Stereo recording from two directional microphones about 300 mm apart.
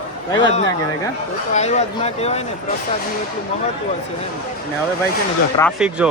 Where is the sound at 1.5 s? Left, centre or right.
Left.